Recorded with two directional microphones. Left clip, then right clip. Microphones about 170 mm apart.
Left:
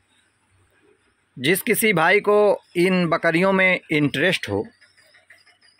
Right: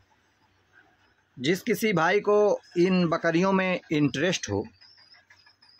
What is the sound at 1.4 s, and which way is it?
Speech, 20° left (ahead or behind).